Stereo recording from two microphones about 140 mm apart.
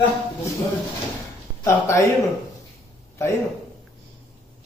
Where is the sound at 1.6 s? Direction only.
20° left (ahead or behind).